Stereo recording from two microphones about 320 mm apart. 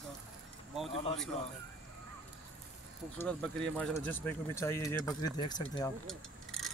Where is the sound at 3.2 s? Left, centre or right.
Centre.